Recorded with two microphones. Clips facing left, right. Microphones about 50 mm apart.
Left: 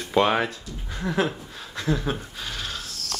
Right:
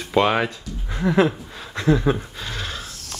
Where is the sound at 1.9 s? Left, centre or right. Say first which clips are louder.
Right 7 dB; centre.